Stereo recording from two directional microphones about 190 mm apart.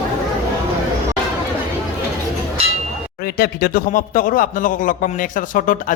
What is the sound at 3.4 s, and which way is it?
A man's voice, 55° left (ahead or behind).